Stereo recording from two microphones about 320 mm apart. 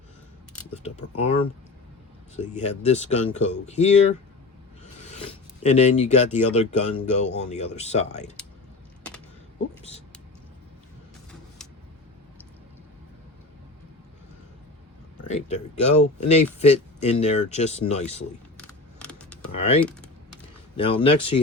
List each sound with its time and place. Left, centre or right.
0.8 s speech: centre
5.6 s speech: left
11.3 s vehicle: centre
15.3 s speech: centre
18.5 s a sound: centre
19.5 s speech: centre